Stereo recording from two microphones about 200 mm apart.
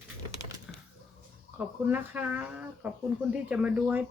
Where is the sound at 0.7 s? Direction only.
5° right (ahead or behind).